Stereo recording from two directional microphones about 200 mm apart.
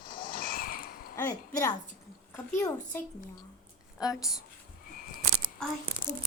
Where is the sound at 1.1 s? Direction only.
10° left (ahead or behind).